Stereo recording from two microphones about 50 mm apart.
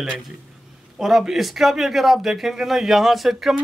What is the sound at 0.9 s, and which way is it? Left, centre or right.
Speech, centre.